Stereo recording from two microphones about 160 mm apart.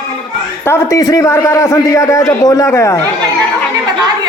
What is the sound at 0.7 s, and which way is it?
A man's voice, 20° left (ahead or behind).